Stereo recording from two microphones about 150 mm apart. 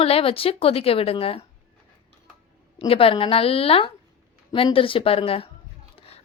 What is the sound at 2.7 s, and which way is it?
A woman's voice, 40° left (ahead or behind).